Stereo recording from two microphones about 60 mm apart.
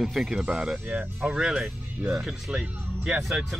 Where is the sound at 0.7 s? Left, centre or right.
Right.